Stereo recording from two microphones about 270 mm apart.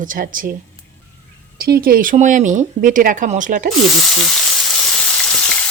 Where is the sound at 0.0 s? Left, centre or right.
Right.